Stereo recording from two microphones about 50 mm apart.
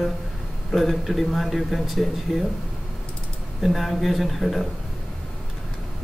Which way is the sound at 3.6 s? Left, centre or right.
Centre.